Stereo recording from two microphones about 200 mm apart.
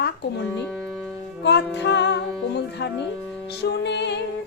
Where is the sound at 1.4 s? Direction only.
60° left (ahead or behind).